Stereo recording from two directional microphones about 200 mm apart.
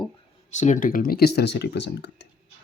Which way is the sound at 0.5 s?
35° left (ahead or behind).